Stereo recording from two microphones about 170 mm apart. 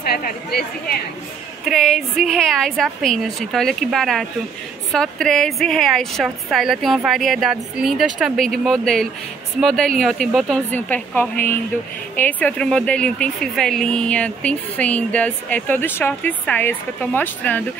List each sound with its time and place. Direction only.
0.1 s a woman's voice: 65° left (ahead or behind)
1.6 s speech: centre (ahead or behind)